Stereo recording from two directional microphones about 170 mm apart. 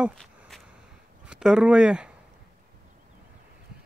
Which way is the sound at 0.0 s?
Centre (ahead or behind).